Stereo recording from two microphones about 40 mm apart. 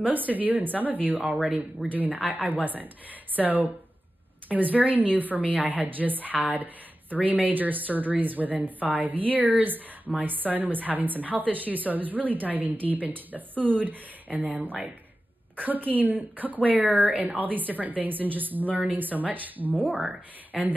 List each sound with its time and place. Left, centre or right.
0.0 s a woman's voice: right
1.2 s speech: centre
1.9 s a woman's voice: right
20.5 s speech: centre